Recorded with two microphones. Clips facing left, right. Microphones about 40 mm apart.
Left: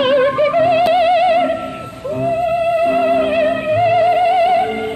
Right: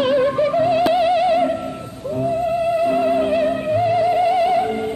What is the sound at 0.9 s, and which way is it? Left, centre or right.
Music, left.